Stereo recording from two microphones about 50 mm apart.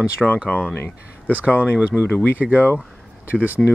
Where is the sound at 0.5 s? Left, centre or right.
Left.